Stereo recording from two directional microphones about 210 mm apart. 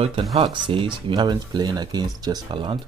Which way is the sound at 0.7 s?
25° right (ahead or behind).